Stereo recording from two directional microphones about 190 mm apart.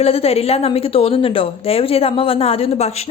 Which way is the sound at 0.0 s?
30° left (ahead or behind).